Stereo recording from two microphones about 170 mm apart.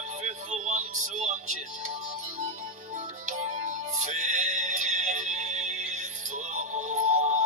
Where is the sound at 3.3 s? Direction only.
45° right (ahead or behind).